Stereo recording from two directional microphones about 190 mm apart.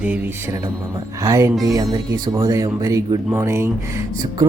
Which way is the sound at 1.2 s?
15° right (ahead or behind).